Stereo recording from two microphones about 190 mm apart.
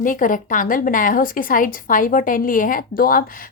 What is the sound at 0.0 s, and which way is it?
Speech, 45° left (ahead or behind).